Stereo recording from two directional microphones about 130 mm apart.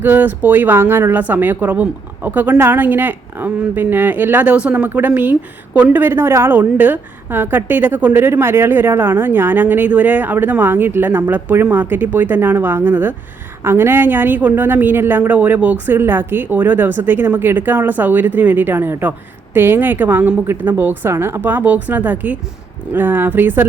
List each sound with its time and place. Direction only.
0.0 s speech: 15° right (ahead or behind)